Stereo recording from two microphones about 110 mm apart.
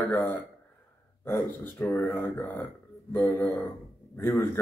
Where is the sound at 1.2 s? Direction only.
25° left (ahead or behind).